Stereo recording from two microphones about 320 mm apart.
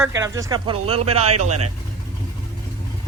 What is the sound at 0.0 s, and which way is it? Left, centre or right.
Speech, centre.